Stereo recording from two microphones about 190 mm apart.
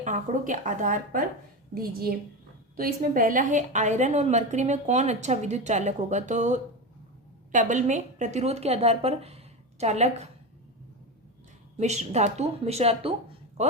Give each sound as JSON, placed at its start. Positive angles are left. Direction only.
{"t": 0.0, "sound": "a woman's voice", "side_deg": -40}
{"t": 11.8, "sound": "a woman's voice", "side_deg": -35}